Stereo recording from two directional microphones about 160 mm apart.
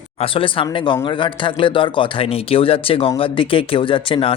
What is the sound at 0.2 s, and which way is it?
Speech, 35° left (ahead or behind).